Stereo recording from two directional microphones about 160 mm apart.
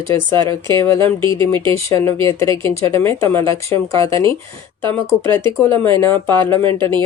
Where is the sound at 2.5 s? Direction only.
35° right (ahead or behind).